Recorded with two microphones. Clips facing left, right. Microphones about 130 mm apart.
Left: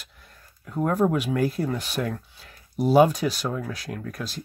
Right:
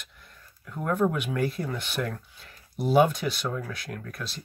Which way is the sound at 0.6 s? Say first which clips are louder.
Left 3 dB; 35° left (ahead or behind).